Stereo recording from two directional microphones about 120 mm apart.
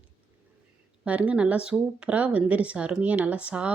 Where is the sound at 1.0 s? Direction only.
10° right (ahead or behind).